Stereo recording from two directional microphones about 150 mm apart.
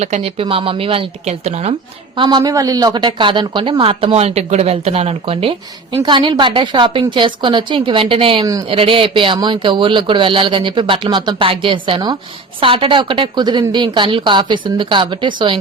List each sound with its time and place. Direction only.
0.0 s speech: 45° right (ahead or behind)
2.1 s speech: 30° right (ahead or behind)